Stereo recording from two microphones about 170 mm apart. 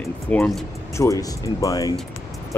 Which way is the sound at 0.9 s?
20° left (ahead or behind).